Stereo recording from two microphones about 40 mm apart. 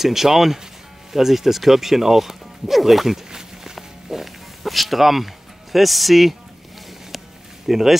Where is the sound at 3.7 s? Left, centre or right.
Centre.